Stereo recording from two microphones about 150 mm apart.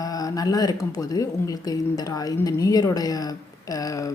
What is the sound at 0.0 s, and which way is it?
A woman's voice, 25° left (ahead or behind).